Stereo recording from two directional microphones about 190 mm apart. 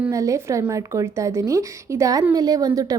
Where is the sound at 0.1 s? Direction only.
15° right (ahead or behind).